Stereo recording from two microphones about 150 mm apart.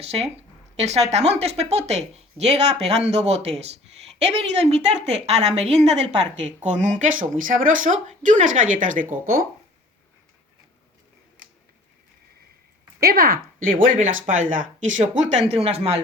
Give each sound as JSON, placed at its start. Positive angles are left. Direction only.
{"t": 0.8, "sound": "a woman's voice", "side_deg": -45}
{"t": 13.0, "sound": "a woman's voice", "side_deg": -90}
{"t": 13.7, "sound": "speech", "side_deg": -65}